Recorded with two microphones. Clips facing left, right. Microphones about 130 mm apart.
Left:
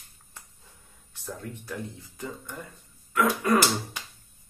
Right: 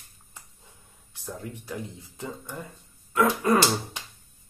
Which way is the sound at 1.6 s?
20° right (ahead or behind).